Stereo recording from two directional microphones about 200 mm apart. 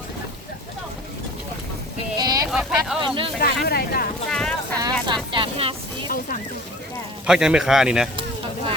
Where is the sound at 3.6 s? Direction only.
50° left (ahead or behind).